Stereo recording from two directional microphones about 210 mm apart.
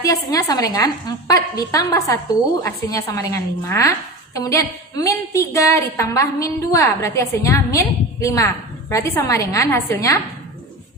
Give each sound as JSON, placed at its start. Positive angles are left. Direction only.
{"t": 0.0, "sound": "a woman's voice", "side_deg": 15}